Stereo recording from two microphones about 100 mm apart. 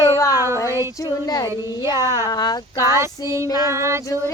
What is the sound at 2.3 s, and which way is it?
Speech, 40° left (ahead or behind).